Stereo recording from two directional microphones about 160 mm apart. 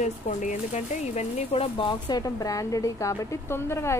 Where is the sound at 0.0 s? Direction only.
50° left (ahead or behind).